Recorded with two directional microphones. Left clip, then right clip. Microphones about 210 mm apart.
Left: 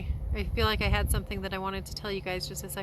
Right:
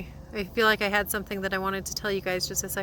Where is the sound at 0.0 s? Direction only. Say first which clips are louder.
Right 4 dB; 15° right (ahead or behind).